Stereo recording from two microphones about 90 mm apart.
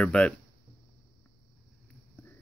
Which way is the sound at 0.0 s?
10° left (ahead or behind).